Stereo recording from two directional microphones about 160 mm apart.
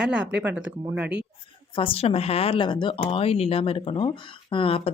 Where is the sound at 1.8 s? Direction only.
35° left (ahead or behind).